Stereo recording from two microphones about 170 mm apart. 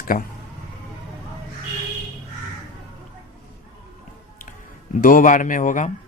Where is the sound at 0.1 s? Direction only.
60° left (ahead or behind).